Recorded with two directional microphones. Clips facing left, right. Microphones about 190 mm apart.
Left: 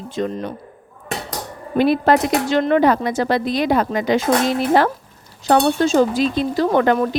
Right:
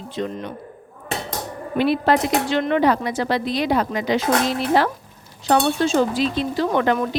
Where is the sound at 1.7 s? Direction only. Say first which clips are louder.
Left 3 dB; 45° left (ahead or behind).